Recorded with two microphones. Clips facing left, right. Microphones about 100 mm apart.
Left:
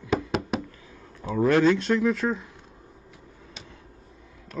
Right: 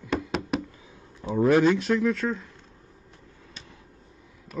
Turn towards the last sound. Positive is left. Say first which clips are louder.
# even
turn(degrees=-5)  # may be behind; listen again after turning